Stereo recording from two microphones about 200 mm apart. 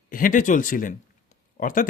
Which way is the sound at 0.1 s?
45° left (ahead or behind).